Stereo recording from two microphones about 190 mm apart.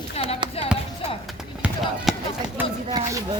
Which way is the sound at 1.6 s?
Centre (ahead or behind).